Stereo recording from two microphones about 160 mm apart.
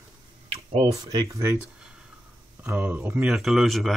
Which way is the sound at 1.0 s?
25° right (ahead or behind).